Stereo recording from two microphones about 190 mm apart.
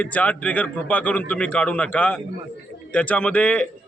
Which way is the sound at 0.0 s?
10° left (ahead or behind).